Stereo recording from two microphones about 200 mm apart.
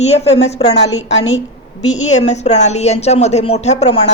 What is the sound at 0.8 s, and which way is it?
Speech, 65° left (ahead or behind).